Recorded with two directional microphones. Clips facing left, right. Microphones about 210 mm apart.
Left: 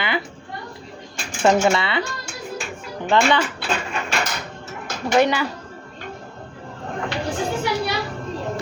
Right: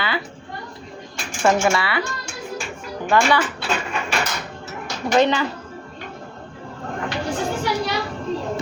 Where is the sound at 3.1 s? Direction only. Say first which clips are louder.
Even; 25° left (ahead or behind).